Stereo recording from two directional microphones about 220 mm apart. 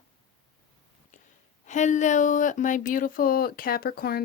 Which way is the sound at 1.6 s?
35° left (ahead or behind).